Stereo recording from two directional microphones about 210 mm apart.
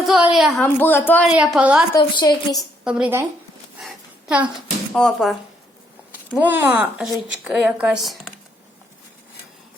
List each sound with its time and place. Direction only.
0.1 s a woman's voice: 5° right (ahead or behind)
1.3 s a woman's voice: 5° right (ahead or behind)
1.9 s a woman's voice: 20° left (ahead or behind)
2.8 s a woman's voice: 5° right (ahead or behind)
3.8 s a sound: 5° right (ahead or behind)
4.9 s a woman's voice: centre (ahead or behind)